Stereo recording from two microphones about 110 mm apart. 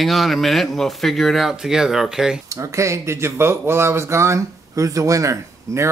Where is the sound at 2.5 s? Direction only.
30° right (ahead or behind).